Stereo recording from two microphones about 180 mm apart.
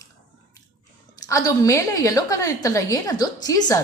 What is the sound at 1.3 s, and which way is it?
A woman's voice, 20° left (ahead or behind).